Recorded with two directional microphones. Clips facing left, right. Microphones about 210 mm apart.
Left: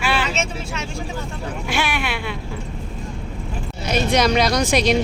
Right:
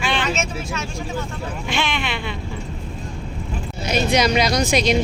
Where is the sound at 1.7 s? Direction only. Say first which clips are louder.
Left 1 dB; 10° left (ahead or behind).